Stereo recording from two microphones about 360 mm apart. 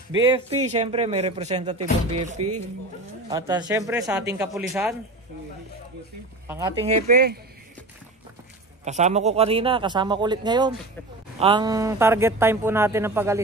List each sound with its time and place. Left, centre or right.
0.1 s speech: centre
6.4 s speech: centre; by 7.3 s right
8.8 s speech: centre